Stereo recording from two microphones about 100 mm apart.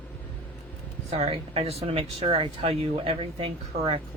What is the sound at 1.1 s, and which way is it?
Speech, 80° right.